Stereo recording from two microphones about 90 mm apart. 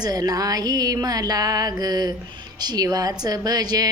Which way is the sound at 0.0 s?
45° right (ahead or behind).